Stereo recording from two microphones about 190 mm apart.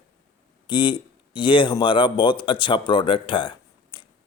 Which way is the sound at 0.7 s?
25° left (ahead or behind).